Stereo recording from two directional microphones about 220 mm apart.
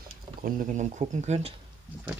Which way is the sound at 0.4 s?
40° right (ahead or behind).